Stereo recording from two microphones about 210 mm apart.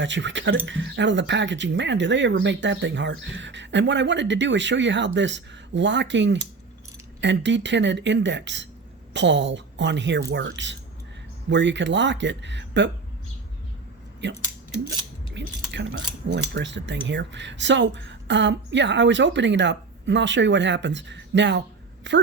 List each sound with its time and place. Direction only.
0.0 s cutlery: 60° right (ahead or behind)
15.4 s cutlery: 60° right (ahead or behind)